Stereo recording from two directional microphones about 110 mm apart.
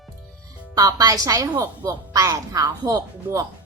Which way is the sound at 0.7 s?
35° right (ahead or behind).